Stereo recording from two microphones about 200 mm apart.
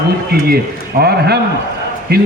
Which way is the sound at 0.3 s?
50° right (ahead or behind).